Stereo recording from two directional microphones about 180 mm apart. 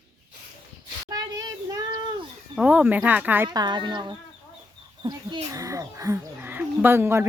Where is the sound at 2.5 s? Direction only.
5° right (ahead or behind).